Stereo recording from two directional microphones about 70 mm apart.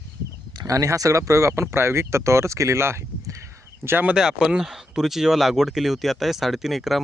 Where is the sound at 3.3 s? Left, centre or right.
Right.